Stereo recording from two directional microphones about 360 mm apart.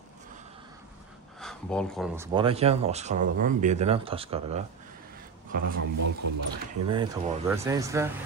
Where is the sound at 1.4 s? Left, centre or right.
Centre.